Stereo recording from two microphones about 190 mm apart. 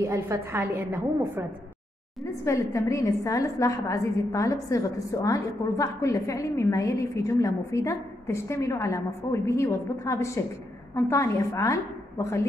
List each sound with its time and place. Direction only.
0.0 s a woman's voice: 15° right (ahead or behind)
2.4 s a woman's voice: 15° left (ahead or behind)